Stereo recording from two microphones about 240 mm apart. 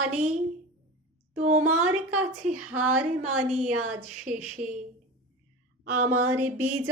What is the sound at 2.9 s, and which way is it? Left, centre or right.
Music, right.